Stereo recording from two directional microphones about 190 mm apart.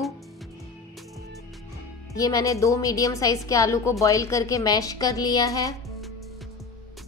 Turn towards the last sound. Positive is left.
turn(degrees=20)  # may be behind; listen again after turning